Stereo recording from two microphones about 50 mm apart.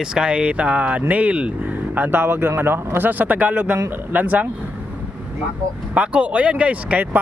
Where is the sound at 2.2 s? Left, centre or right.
Right.